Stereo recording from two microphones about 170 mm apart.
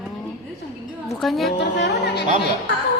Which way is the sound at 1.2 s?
Centre (ahead or behind).